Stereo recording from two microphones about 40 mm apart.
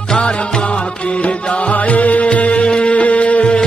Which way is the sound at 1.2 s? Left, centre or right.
Left.